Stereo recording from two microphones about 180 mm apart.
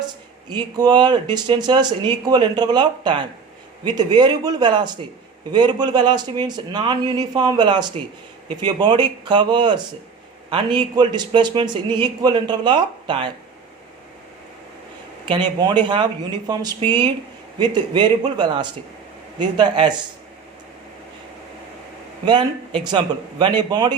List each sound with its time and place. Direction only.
0.5 s a man's voice: 25° right (ahead or behind)
15.3 s a man's voice: 25° right (ahead or behind)
22.3 s a man's voice: 25° right (ahead or behind)